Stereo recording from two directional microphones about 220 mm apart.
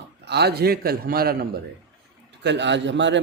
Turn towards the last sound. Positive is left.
turn(degrees=-55)  # may be behind; listen again after turning